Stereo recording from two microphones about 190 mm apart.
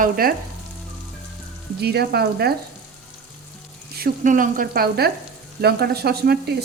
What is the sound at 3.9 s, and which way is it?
Frying, 45° right (ahead or behind).